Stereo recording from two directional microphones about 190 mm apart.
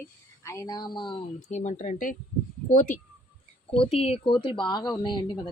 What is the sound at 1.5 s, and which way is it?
Speech, 40° left (ahead or behind).